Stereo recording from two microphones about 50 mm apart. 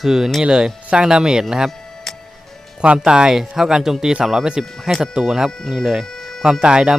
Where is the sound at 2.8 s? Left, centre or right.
Centre.